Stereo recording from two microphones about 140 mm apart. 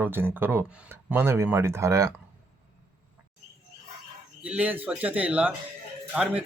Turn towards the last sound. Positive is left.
turn(degrees=-10)  # may be behind; listen again after turning